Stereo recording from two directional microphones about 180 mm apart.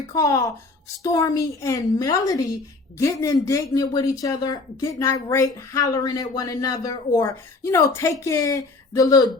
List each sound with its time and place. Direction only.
0.1 s speech: 20° left (ahead or behind)